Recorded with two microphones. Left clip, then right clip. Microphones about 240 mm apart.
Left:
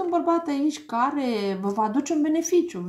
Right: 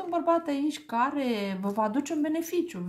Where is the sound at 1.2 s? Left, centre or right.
Right.